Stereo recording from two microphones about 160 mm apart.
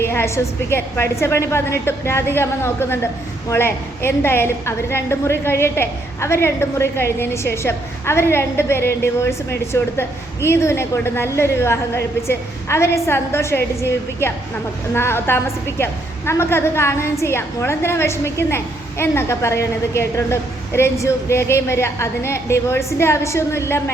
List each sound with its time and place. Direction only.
0.0 s a woman's voice: 15° left (ahead or behind)